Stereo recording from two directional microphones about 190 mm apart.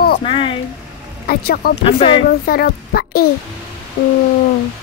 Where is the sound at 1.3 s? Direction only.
55° left (ahead or behind).